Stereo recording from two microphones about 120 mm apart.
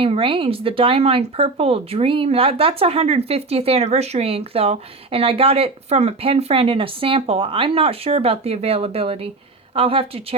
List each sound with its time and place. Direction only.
0.0 s speech: 50° right (ahead or behind)